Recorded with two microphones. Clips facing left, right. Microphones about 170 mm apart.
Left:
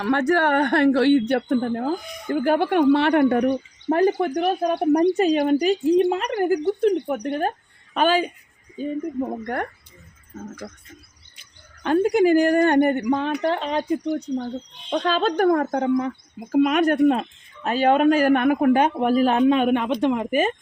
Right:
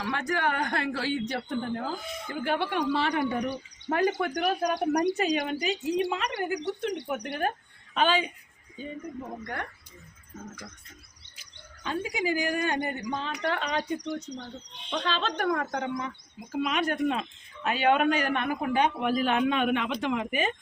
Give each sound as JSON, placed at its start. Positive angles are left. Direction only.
{"t": 0.0, "sound": "speech", "side_deg": 65}
{"t": 2.0, "sound": "speech", "side_deg": -25}
{"t": 2.3, "sound": "speech", "side_deg": 45}
{"t": 3.8, "sound": "speech", "side_deg": 35}
{"t": 5.1, "sound": "speech", "side_deg": 45}
{"t": 11.8, "sound": "speech", "side_deg": 65}
{"t": 13.4, "sound": "speech", "side_deg": 30}
{"t": 14.4, "sound": "speech", "side_deg": 50}